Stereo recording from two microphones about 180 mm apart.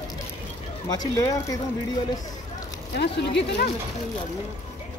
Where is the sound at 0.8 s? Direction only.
20° left (ahead or behind).